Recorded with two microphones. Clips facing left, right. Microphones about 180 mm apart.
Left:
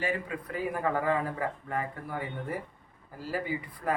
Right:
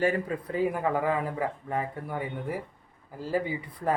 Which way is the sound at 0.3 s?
35° right (ahead or behind).